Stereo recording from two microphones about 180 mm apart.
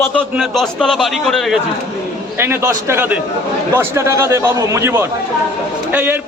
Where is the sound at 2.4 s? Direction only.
15° right (ahead or behind).